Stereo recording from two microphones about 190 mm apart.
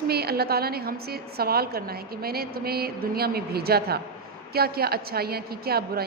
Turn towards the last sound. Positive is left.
turn(degrees=-55)  # may be behind; listen again after turning